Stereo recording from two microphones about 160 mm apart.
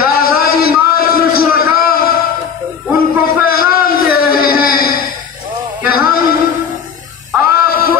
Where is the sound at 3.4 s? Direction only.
70° left (ahead or behind).